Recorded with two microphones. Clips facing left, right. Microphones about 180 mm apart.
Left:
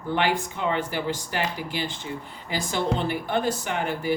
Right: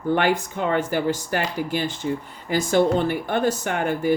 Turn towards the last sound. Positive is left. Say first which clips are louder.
# right 4 dB
turn(degrees=-50)  # may be behind; listen again after turning